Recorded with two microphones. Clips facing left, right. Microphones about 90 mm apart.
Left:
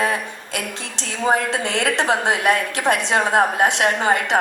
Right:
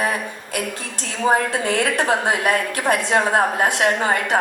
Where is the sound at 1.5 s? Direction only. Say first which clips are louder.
Right 1 dB; 20° left (ahead or behind).